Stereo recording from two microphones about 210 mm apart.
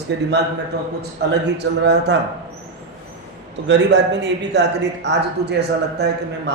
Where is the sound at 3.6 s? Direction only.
55° right (ahead or behind).